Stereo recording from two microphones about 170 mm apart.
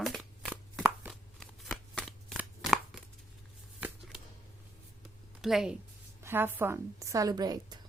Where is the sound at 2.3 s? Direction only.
5° right (ahead or behind).